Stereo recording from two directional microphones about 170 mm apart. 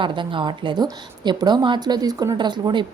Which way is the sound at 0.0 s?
30° right (ahead or behind).